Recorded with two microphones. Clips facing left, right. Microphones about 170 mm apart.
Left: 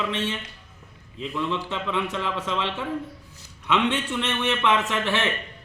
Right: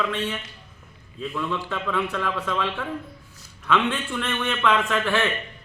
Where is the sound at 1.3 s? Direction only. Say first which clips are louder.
Left 1 dB; 20° left (ahead or behind).